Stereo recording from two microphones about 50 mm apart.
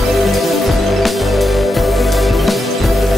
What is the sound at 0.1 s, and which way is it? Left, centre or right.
Music, centre.